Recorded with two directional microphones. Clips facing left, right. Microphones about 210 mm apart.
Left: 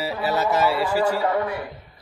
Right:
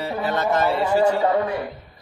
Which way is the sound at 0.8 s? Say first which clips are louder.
Right 3 dB; 25° right (ahead or behind).